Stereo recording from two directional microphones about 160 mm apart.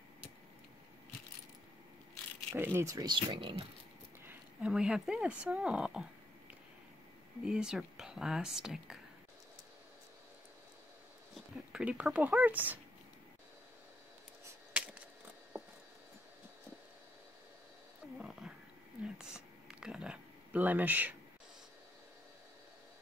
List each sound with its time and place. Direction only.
2.5 s speech: 15° right (ahead or behind); by 3.6 s 30° right (ahead or behind)
4.3 s speech: 5° right (ahead or behind)
7.4 s speech: 5° right (ahead or behind)
11.3 s speech: 5° right (ahead or behind)
14.7 s a sound: 10° right (ahead or behind)
18.2 s a sound: 5° right (ahead or behind)